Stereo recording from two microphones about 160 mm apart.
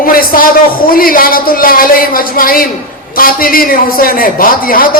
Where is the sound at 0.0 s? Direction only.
65° left (ahead or behind).